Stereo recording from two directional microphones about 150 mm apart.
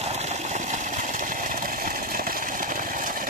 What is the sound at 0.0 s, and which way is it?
Engine, 45° right (ahead or behind).